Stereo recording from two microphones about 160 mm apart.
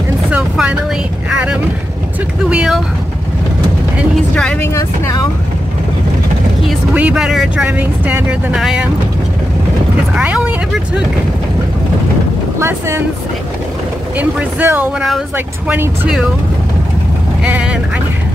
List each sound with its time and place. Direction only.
0.3 s vehicle: 5° right (ahead or behind)
2.5 s speech: 5° right (ahead or behind)
4.4 s speech: 5° left (ahead or behind)
4.7 s speech: 20° left (ahead or behind)
7.0 s speech: 5° right (ahead or behind)
10.1 s speech: 5° right (ahead or behind)
12.5 s speech: 15° right (ahead or behind)
14.1 s speech: 10° right (ahead or behind)
17.4 s speech: 5° right (ahead or behind)